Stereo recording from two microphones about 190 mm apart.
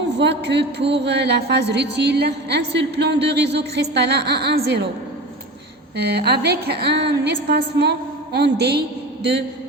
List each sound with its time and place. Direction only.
0.2 s a woman's voice: 65° right (ahead or behind)
6.0 s a woman's voice: 55° right (ahead or behind)